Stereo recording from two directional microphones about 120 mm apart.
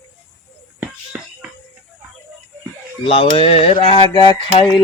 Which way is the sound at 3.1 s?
50° left (ahead or behind).